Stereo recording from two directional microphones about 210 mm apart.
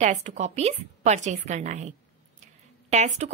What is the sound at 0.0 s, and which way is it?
Speech, 35° right (ahead or behind).